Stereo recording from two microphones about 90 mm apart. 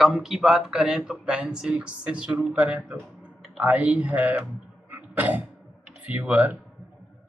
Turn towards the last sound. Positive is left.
turn(degrees=-15)  # may be behind; listen again after turning